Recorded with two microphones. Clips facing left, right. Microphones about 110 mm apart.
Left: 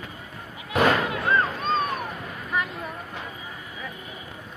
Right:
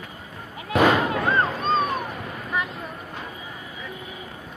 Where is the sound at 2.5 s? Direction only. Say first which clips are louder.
Even; centre (ahead or behind).